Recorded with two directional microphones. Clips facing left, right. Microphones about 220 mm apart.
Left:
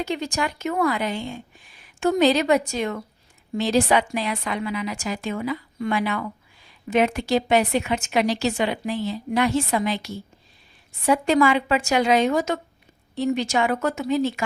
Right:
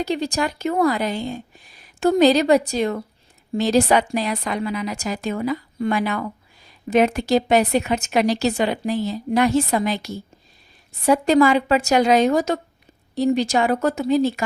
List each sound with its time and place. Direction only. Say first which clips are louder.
0.0 s a woman's voice: right 3 dB; 35° right (ahead or behind)